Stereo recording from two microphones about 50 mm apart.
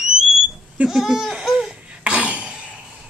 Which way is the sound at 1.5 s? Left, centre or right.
Centre.